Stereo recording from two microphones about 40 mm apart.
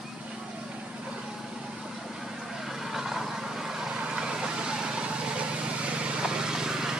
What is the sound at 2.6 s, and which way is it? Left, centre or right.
Vehicle, centre.